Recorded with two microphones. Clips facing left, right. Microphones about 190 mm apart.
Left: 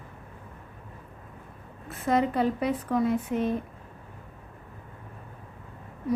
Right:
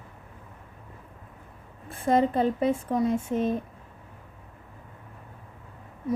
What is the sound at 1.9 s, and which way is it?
Speech, 30° right (ahead or behind).